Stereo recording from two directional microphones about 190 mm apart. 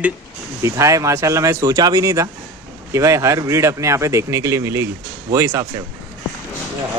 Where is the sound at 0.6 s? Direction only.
15° right (ahead or behind).